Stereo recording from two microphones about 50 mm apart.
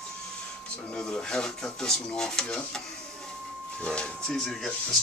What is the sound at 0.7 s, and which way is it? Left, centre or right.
Speech, centre.